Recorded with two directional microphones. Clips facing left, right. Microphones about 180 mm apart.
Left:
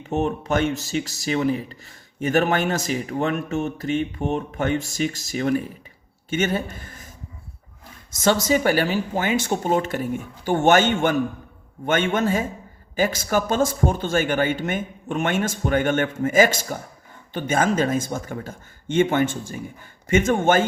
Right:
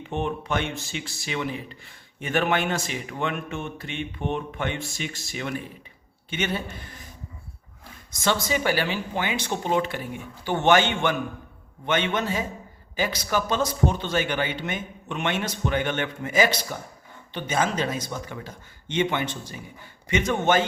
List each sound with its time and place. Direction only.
0.1 s speech: 40° left (ahead or behind)
8.1 s speech: 45° left (ahead or behind)